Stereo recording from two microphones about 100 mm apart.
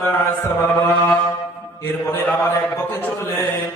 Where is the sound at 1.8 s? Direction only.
20° left (ahead or behind).